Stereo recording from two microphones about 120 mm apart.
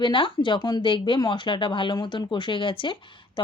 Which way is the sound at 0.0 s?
40° left (ahead or behind).